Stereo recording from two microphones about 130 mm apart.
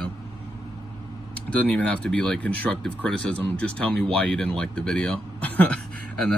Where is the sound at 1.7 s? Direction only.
10° left (ahead or behind).